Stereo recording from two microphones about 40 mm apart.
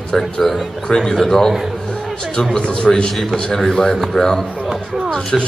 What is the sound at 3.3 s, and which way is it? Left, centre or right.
A man's voice, centre.